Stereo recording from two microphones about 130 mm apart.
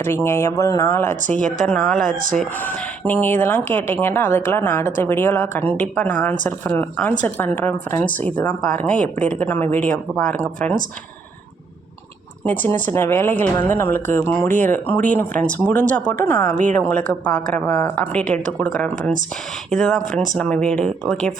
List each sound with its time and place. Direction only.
0.0 s speech: 15° left (ahead or behind)
12.5 s speech: 15° left (ahead or behind)